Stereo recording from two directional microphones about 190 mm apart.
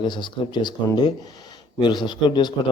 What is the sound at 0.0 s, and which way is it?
Speech, 25° left (ahead or behind).